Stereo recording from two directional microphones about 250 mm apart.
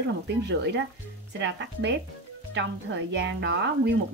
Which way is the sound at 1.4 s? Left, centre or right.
Right.